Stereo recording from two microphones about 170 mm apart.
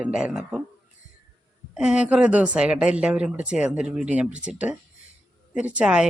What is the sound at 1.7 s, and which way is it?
Speech, 5° right (ahead or behind).